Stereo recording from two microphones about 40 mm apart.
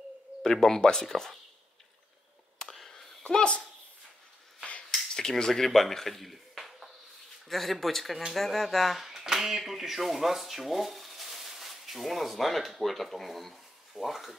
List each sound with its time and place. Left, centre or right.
0.4 s speech: centre
3.0 s sneeze: centre
3.3 s speech: left
5.1 s a man's voice: centre